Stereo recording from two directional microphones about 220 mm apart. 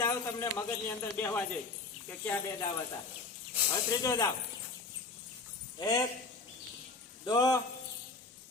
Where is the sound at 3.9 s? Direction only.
15° left (ahead or behind).